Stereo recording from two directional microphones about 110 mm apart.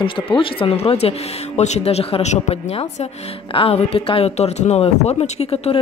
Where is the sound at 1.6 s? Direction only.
85° left; by 5.8 s 65° left (ahead or behind).